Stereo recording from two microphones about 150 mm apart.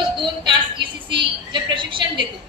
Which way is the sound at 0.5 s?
30° right (ahead or behind).